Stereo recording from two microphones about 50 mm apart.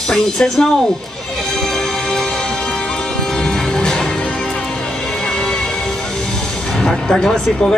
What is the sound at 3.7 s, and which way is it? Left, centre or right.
Music, centre.